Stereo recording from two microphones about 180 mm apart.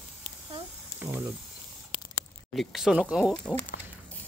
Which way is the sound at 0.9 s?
15° right (ahead or behind).